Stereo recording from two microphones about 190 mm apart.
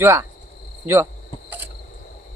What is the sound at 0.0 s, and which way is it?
Speech, 15° right (ahead or behind).